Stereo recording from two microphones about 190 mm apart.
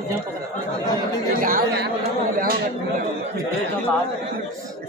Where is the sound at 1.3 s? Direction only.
50° right (ahead or behind).